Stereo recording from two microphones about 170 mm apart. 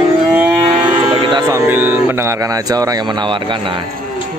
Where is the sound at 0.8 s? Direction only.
25° right (ahead or behind).